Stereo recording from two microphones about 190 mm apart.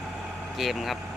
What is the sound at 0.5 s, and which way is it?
Speech, centre (ahead or behind).